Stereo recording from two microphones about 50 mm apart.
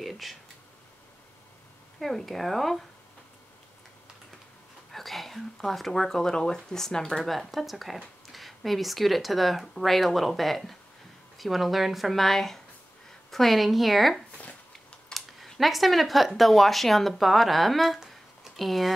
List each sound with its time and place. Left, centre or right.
0.0 s speech: centre
2.0 s speech: centre
4.9 s speech: centre
7.2 s speech: centre